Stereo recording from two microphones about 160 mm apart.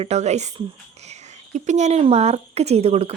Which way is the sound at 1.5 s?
45° right (ahead or behind).